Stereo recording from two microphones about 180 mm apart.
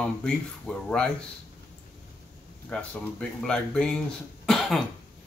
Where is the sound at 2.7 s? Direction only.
5° left (ahead or behind).